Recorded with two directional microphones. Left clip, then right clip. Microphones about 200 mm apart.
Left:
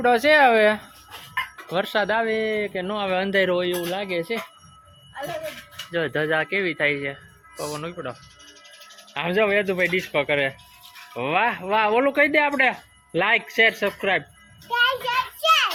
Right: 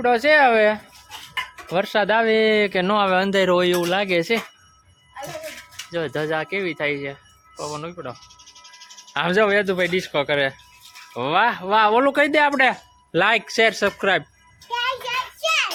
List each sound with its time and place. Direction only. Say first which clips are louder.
0.0 s speech: right 1 dB; 5° right (ahead or behind)
1.7 s speech: right 3 dB; 25° right (ahead or behind); by 4.4 s 45° right (ahead or behind)
5.9 s speech: left 1 dB; 10° right (ahead or behind)
9.1 s speech: right 3 dB; 30° right (ahead or behind)
14.7 s a sound: left 3 dB; centre (ahead or behind)